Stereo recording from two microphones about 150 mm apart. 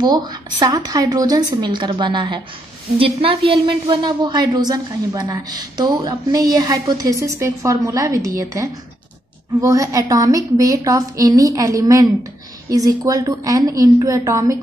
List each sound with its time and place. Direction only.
0.0 s a woman's voice: 30° right (ahead or behind)